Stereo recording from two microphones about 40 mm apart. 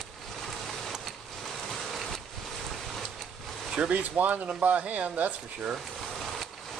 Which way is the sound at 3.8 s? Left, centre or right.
Right.